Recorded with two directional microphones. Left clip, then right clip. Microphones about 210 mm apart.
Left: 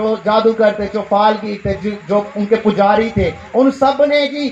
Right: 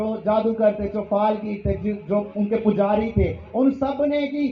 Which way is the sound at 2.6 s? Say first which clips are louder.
Left 8 dB; 40° left (ahead or behind).